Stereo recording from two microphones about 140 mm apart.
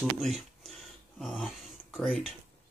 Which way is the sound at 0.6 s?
Centre (ahead or behind).